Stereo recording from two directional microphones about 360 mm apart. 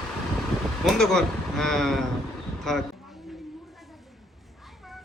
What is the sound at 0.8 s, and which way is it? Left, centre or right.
Speech, centre.